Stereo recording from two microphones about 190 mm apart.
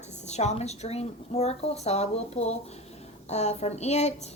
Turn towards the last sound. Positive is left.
turn(degrees=35)  # may be behind; listen again after turning